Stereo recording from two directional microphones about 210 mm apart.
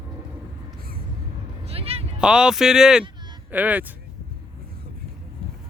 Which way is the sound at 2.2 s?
5° right (ahead or behind).